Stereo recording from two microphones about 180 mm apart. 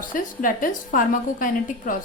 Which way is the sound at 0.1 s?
50° left (ahead or behind).